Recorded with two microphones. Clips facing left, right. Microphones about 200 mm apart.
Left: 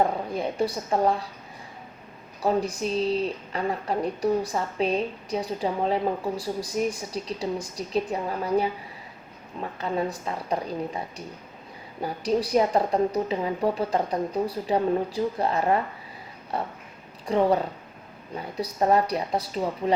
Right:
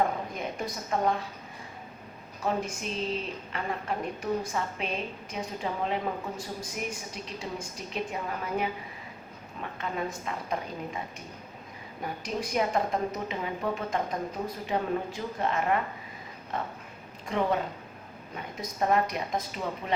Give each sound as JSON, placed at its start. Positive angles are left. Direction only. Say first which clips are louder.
{"t": 0.3, "sound": "a woman's voice", "louder": "left 8 dB", "side_deg": 30}
{"t": 2.4, "sound": "a woman's voice", "louder": "left 6 dB", "side_deg": 35}
{"t": 12.0, "sound": "a woman's voice", "louder": "left 8 dB", "side_deg": 35}